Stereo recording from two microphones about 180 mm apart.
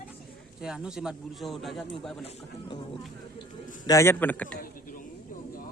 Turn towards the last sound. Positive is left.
turn(degrees=10)  # may be behind; listen again after turning